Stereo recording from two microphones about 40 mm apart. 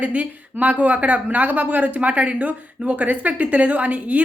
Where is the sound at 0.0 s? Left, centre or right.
Right.